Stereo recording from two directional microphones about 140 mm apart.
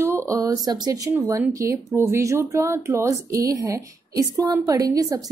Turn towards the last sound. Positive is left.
turn(degrees=-25)  # may be behind; listen again after turning